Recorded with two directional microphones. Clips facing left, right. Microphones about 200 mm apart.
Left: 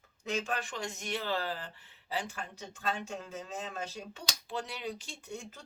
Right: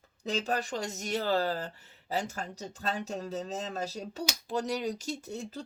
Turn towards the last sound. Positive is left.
turn(degrees=-35)  # may be behind; listen again after turning